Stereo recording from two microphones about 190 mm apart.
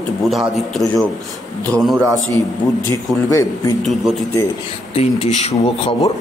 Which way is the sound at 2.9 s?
15° left (ahead or behind).